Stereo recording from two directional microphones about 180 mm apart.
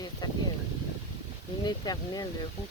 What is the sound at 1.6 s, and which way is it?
Speech, 20° left (ahead or behind).